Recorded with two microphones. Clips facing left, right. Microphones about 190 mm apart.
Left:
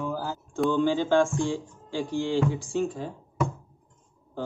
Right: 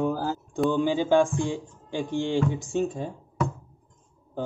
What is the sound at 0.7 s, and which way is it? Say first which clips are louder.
Speech: right 1 dB; 15° right (ahead or behind).